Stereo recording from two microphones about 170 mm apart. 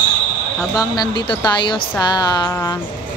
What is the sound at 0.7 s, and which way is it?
Speech, 25° left (ahead or behind).